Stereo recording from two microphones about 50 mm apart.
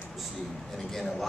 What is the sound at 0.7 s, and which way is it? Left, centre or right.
Speech, centre.